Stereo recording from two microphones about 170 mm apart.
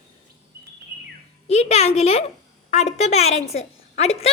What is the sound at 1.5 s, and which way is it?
A woman's voice, 40° left (ahead or behind).